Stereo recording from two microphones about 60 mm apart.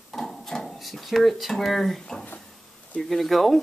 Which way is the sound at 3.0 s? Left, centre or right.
Centre.